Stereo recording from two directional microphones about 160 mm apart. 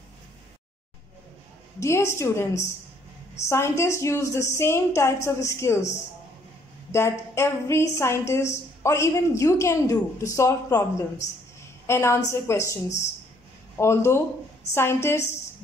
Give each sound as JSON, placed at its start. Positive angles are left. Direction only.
{"t": 1.8, "sound": "a woman's voice", "side_deg": 15}
{"t": 3.4, "sound": "a woman's voice", "side_deg": 15}